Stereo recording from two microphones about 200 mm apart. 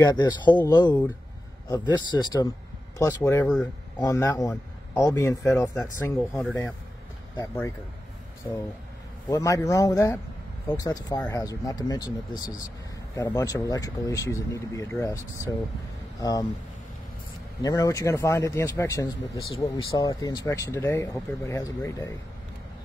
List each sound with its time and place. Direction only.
0.0 s speech: 20° left (ahead or behind)
5.8 s speech: 5° left (ahead or behind)
9.3 s speech: 15° left (ahead or behind)
17.6 s speech: 20° left (ahead or behind)
19.5 s speech: 25° left (ahead or behind)